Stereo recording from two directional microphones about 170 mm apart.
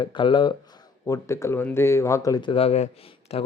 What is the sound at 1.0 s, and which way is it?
Speech, 15° left (ahead or behind).